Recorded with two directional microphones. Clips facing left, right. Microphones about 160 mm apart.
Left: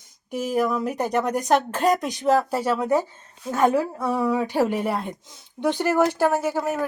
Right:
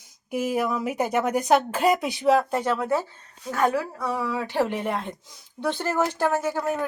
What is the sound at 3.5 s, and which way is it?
A woman's voice, 25° left (ahead or behind).